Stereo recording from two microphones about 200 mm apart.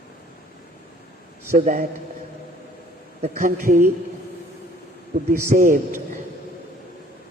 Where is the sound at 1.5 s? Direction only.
45° right (ahead or behind).